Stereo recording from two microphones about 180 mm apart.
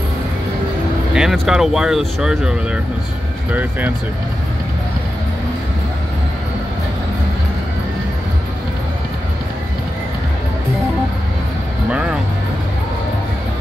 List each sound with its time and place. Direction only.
1.1 s speech: centre (ahead or behind)